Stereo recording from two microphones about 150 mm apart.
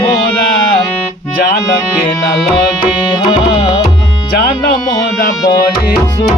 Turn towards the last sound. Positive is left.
turn(degrees=20)  # may be behind; listen again after turning